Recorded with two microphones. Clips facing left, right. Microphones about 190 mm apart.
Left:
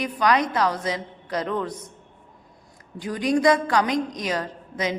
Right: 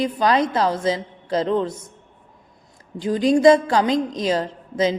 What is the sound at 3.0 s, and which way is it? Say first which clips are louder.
A woman's voice: right 6 dB; 25° right (ahead or behind).